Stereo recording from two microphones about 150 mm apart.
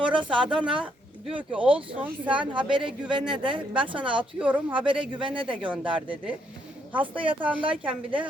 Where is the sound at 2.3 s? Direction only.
35° right (ahead or behind).